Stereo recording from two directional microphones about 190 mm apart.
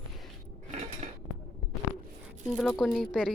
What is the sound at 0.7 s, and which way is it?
Dishes, 35° right (ahead or behind).